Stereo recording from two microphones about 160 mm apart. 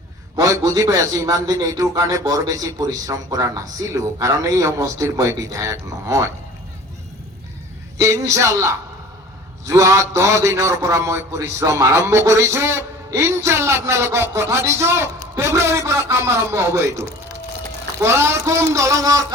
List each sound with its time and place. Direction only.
0.3 s a man's voice: 20° right (ahead or behind)
7.9 s a man's voice: 20° right (ahead or behind)